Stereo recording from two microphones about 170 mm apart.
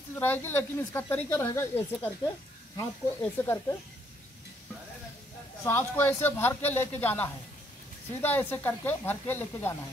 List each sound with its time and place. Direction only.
0.1 s speech: 15° left (ahead or behind)
5.6 s speech: 15° left (ahead or behind)